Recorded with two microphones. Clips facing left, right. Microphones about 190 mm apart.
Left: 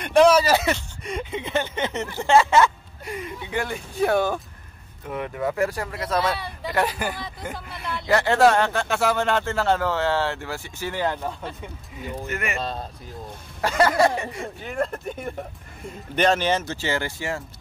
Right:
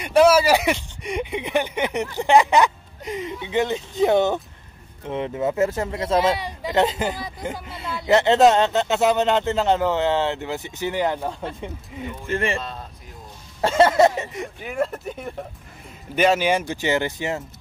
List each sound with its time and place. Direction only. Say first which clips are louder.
0.0 s speech: right 1 dB; 5° right (ahead or behind)
12.3 s speech: right 7 dB; 30° right (ahead or behind)
12.5 s a man's voice: left 2 dB; 35° left (ahead or behind)
13.6 s speech: right 4 dB; 25° right (ahead or behind)
14.7 s speech: right 2 dB; 5° right (ahead or behind); by 17.4 s 20° right (ahead or behind)